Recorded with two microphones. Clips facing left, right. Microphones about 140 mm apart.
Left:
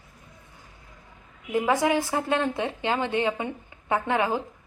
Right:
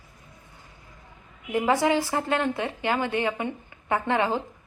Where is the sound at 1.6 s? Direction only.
15° left (ahead or behind).